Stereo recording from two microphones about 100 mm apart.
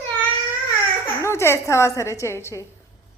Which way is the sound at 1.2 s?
25° left (ahead or behind).